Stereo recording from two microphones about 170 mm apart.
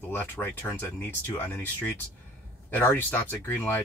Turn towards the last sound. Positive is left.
turn(degrees=10)  # may be behind; listen again after turning